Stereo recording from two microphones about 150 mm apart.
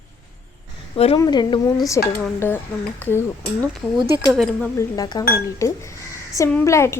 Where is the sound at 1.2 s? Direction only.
30° left (ahead or behind).